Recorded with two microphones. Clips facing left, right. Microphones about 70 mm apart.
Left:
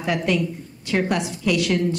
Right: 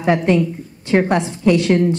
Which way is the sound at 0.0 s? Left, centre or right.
Right.